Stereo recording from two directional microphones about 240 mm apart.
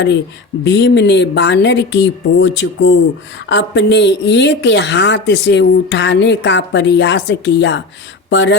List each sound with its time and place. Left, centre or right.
0.6 s speech: left